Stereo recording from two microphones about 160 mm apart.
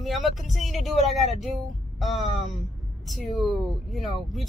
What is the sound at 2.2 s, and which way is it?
Speech, 35° left (ahead or behind).